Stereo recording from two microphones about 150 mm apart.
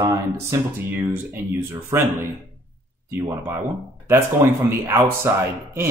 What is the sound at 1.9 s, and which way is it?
Speech, 20° right (ahead or behind).